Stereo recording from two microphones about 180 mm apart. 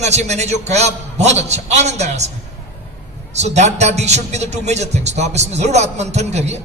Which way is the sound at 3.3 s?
40° right (ahead or behind).